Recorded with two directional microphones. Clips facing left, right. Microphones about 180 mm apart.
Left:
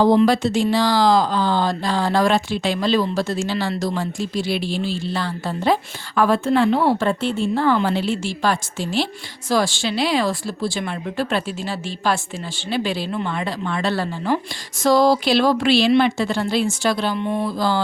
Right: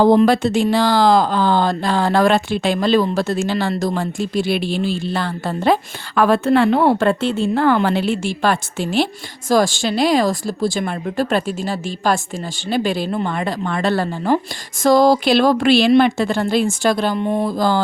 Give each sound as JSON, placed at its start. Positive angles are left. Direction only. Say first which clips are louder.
{"t": 0.0, "sound": "speech", "louder": "right 3 dB", "side_deg": -50}
{"t": 9.5, "sound": "speech", "louder": "right 4 dB", "side_deg": -45}